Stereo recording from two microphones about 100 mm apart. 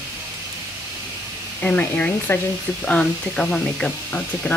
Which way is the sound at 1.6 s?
15° left (ahead or behind).